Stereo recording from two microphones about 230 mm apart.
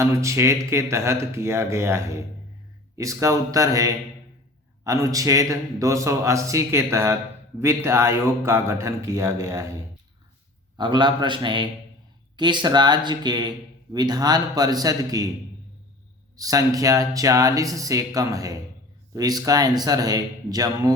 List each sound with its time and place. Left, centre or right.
0.0 s a man's voice: centre
10.8 s a man's voice: centre
16.4 s a man's voice: centre